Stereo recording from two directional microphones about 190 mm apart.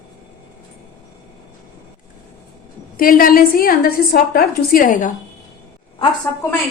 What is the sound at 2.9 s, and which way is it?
A woman's voice, 50° left (ahead or behind).